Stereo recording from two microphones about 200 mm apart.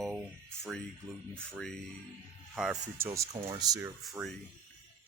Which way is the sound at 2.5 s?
5° right (ahead or behind).